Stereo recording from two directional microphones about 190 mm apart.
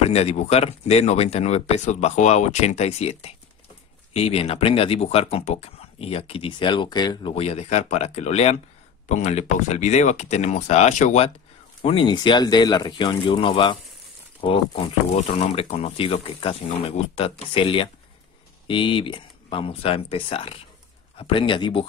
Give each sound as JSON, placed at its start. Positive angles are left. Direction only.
{"t": 0.0, "sound": "speech", "side_deg": 35}